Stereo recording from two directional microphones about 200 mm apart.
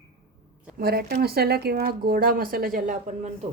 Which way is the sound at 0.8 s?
50° right (ahead or behind).